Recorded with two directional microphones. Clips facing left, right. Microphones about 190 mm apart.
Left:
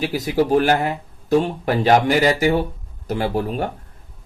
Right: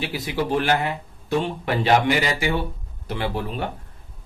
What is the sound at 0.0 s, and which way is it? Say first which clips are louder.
Speech: left 6 dB; 40° left (ahead or behind).